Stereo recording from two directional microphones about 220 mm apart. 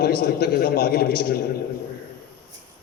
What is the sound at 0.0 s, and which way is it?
A man's voice, 45° left (ahead or behind).